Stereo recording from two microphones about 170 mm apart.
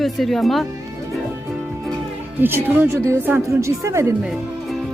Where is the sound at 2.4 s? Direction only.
15° right (ahead or behind).